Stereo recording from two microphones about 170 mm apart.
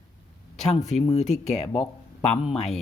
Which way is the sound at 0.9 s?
40° left (ahead or behind).